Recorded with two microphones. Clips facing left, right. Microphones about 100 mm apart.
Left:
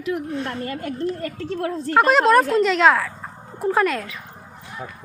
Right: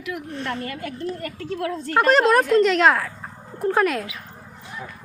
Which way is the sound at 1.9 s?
Centre (ahead or behind).